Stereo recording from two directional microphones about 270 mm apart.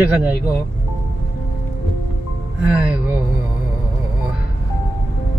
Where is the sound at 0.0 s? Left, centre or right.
Centre.